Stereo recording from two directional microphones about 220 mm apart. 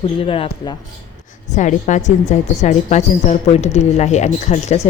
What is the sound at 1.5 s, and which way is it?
A woman's voice, 35° left (ahead or behind).